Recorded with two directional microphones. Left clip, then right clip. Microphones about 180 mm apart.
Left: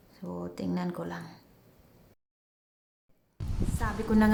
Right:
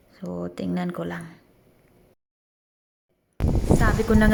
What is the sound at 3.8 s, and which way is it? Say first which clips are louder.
Speech: right 4 dB; 15° right (ahead or behind).